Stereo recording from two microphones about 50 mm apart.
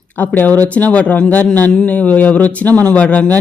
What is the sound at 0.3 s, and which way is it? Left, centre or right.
A woman's voice, left.